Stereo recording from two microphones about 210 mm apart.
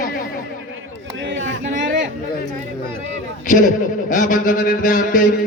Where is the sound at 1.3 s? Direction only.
60° right (ahead or behind).